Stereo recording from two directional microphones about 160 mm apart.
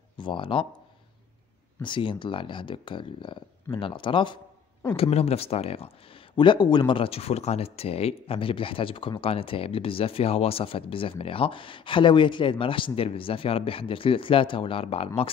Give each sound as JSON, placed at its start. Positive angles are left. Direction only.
{"t": 0.2, "sound": "speech", "side_deg": 30}
{"t": 1.8, "sound": "speech", "side_deg": 30}